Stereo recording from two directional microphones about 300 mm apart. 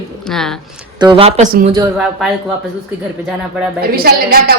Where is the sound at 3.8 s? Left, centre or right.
Right.